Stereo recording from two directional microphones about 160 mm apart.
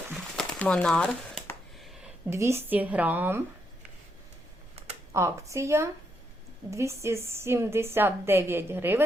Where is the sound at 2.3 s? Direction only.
15° right (ahead or behind).